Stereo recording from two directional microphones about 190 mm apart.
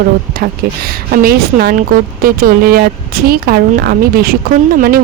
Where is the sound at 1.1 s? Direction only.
50° right (ahead or behind).